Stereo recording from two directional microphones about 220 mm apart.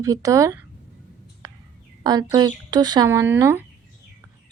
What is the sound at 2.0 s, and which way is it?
Speech, 15° right (ahead or behind).